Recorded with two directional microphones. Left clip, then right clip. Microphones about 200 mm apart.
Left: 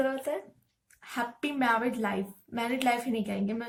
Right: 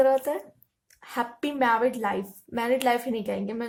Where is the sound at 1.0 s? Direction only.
45° right (ahead or behind).